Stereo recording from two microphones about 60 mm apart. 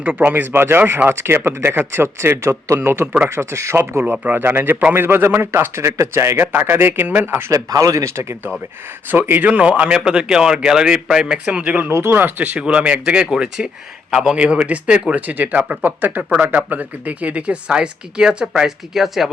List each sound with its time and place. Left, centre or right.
0.0 s a man's voice: right
2.8 s a man's voice: right
4.0 s a man's voice: right
6.4 s speech: right
7.5 s speech: right
8.1 s a man's voice: right
9.0 s speech: right
9.5 s a man's voice: right
11.4 s speech: right
11.8 s a man's voice: right; by 19.3 s centre